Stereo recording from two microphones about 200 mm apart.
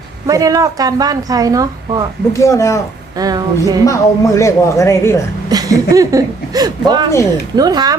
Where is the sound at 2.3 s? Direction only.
15° left (ahead or behind).